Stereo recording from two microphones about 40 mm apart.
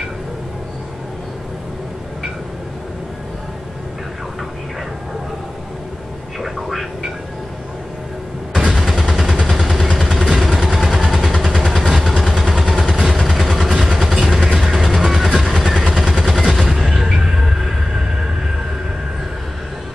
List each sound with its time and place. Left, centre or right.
6.4 s vehicle: centre
8.5 s vehicle: centre
8.8 s vehicle: centre